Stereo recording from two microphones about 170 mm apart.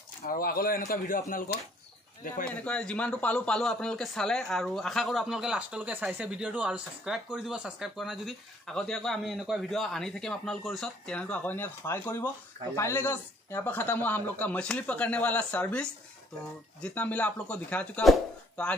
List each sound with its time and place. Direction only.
0.3 s a man's voice: 60° left (ahead or behind)
2.5 s a man's voice: 5° left (ahead or behind)